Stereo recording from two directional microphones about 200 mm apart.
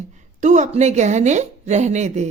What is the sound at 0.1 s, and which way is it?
A woman's voice, 35° right (ahead or behind).